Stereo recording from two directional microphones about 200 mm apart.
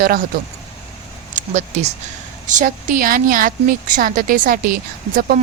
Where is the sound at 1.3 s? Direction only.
35° right (ahead or behind).